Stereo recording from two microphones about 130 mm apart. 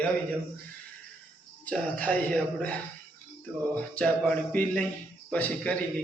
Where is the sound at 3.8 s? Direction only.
10° left (ahead or behind).